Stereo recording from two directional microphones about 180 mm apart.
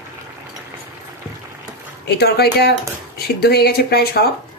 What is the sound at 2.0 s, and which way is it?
Speech, 65° left (ahead or behind).